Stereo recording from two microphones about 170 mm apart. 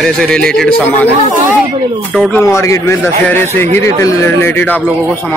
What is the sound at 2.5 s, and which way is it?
A man's voice, 15° left (ahead or behind).